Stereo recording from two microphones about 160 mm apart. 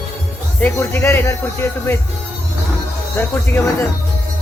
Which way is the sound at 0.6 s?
10° left (ahead or behind).